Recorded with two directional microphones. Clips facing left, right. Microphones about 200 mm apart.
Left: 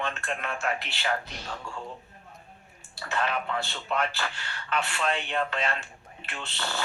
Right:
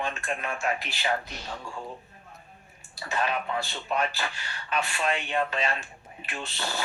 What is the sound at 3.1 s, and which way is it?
Speech, 20° right (ahead or behind).